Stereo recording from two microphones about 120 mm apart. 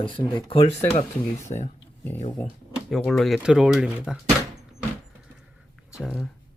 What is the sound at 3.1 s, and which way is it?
Speech, 5° left (ahead or behind).